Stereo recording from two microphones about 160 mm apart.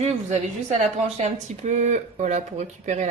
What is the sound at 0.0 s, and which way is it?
Speech, 45° right (ahead or behind).